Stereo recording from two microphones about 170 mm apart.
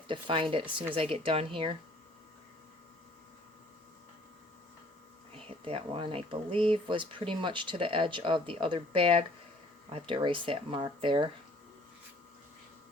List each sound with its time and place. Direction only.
0.1 s speech: 30° right (ahead or behind)
5.6 s speech: 35° right (ahead or behind)